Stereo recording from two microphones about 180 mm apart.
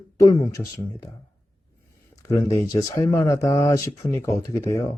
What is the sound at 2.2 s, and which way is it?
Speech, 20° left (ahead or behind).